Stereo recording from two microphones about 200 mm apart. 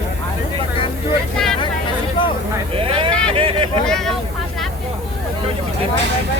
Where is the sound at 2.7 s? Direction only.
25° right (ahead or behind).